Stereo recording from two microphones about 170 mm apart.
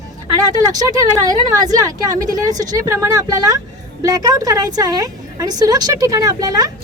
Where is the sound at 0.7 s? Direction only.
20° right (ahead or behind).